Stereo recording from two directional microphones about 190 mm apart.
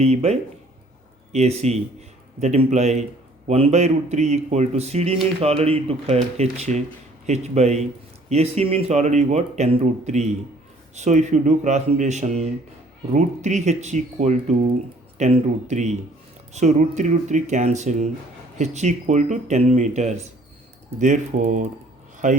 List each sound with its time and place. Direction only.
0.0 s speech: 35° right (ahead or behind)